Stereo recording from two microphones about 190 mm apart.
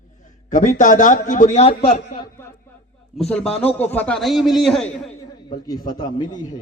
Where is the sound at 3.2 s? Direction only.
5° left (ahead or behind).